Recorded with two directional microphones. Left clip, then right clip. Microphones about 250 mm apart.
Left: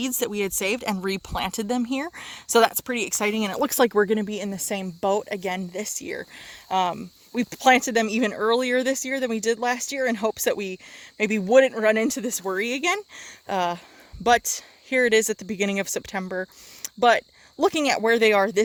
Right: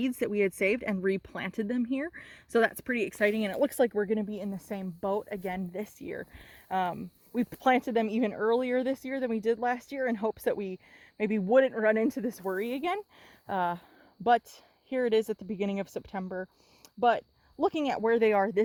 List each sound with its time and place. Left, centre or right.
0.0 s speech: centre